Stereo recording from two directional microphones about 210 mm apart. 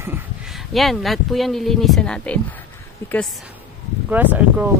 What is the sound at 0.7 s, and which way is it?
Speech, centre (ahead or behind).